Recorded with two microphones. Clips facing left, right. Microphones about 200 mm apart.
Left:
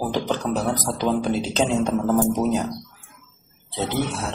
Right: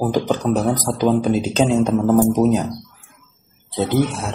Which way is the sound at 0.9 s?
35° right (ahead or behind).